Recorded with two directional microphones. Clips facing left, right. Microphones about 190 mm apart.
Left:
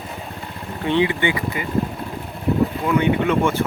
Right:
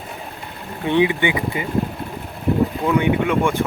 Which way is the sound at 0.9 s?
15° right (ahead or behind).